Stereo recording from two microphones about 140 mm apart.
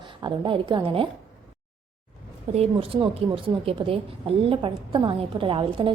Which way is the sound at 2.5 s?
45° right (ahead or behind).